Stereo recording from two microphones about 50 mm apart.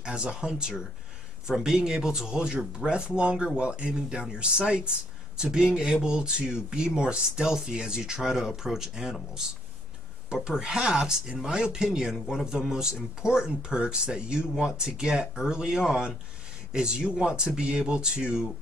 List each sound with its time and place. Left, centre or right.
0.0 s speech: centre